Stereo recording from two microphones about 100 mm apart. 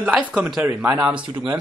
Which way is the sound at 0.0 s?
15° right (ahead or behind).